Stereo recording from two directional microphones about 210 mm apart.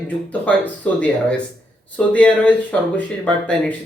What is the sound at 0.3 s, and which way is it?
Speech, 5° left (ahead or behind).